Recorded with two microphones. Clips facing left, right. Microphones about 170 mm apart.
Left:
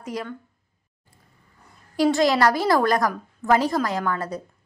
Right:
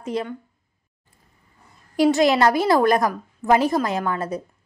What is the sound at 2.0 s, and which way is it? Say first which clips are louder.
A woman's voice: right 2 dB; 20° right (ahead or behind).